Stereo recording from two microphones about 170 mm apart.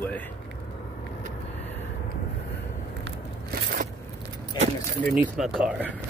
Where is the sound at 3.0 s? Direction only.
60° right (ahead or behind).